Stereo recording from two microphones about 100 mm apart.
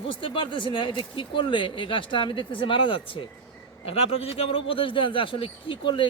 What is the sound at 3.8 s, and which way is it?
Speech, 80° left.